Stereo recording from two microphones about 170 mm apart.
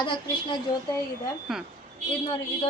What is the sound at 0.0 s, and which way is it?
Speech, 30° left (ahead or behind).